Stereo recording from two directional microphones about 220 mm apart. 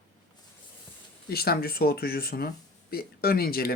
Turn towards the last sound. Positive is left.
turn(degrees=45)  # may be behind; listen again after turning